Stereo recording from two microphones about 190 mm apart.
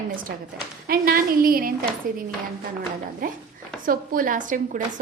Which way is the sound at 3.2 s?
45° right (ahead or behind).